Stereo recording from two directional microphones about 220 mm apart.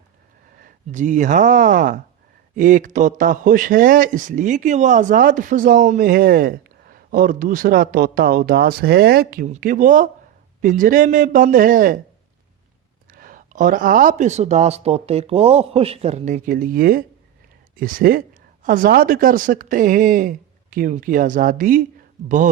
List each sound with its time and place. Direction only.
0.6 s speech: 35° right (ahead or behind)
13.1 s speech: 40° right (ahead or behind)